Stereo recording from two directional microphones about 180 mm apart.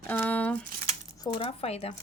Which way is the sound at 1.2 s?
30° left (ahead or behind).